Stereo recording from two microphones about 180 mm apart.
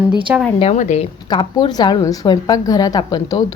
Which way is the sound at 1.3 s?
25° left (ahead or behind).